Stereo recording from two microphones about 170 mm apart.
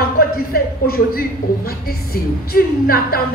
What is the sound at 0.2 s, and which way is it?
Speech, 60° left (ahead or behind).